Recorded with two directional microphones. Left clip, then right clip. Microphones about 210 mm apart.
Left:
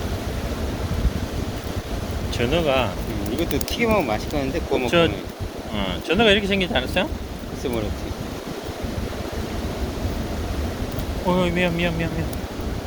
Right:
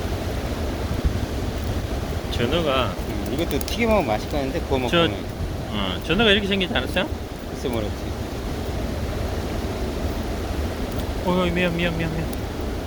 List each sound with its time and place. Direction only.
2.4 s speech: 25° left (ahead or behind)
3.4 s speech: 5° left (ahead or behind)
4.9 s speech: 20° left (ahead or behind)
11.3 s speech: 15° left (ahead or behind)